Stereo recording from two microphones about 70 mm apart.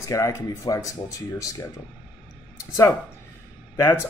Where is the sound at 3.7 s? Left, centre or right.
Left.